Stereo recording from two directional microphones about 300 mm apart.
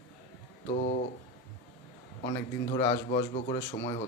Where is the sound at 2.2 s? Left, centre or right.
Centre.